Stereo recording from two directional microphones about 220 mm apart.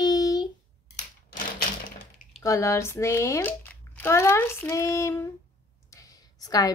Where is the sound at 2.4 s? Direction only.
15° left (ahead or behind).